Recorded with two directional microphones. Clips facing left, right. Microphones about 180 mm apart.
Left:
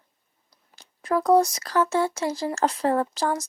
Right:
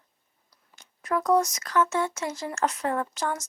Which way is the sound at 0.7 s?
30° left (ahead or behind).